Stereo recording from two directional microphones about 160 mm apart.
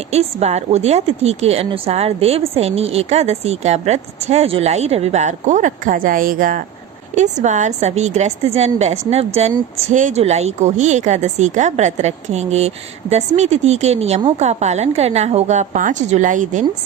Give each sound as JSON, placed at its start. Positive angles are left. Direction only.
{"t": 0.1, "sound": "a woman's voice", "side_deg": -40}
{"t": 7.2, "sound": "a woman's voice", "side_deg": -50}